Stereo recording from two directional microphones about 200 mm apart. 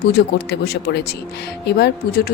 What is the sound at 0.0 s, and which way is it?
A woman's voice, 50° left (ahead or behind).